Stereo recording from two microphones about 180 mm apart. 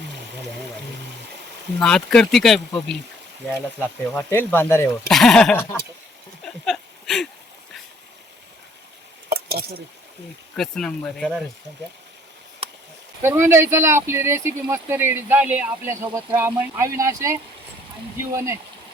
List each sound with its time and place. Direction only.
1.8 s speech: centre (ahead or behind)
4.1 s speech: 10° left (ahead or behind)
5.5 s speech: 15° left (ahead or behind)
6.4 s a sound: centre (ahead or behind)
9.3 s a sound: 60° right (ahead or behind)
10.6 s speech: 5° left (ahead or behind)
12.6 s a sound: 30° right (ahead or behind)
13.2 s speech: 15° right (ahead or behind)
18.3 s speech: 15° right (ahead or behind)